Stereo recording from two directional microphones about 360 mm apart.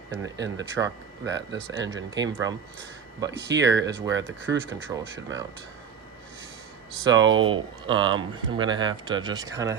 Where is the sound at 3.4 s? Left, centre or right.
Right.